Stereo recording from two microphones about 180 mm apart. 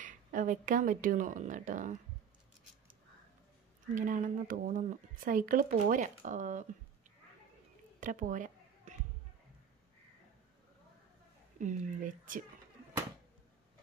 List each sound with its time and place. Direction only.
0.0 s speech: 45° right (ahead or behind)
3.9 s speech: 45° right (ahead or behind)
8.0 s a sound: 45° right (ahead or behind)
11.5 s speech: 45° right (ahead or behind)